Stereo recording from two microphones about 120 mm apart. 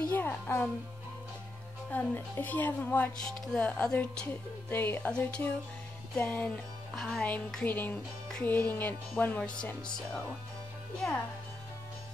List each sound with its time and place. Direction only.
0.1 s music: 15° left (ahead or behind)
1.9 s music: 15° left (ahead or behind)